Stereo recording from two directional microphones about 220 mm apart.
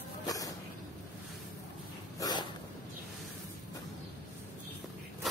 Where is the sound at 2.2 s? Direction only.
20° left (ahead or behind).